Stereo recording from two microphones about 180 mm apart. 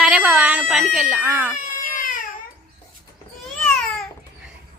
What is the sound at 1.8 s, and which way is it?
Baby cry, 50° left (ahead or behind).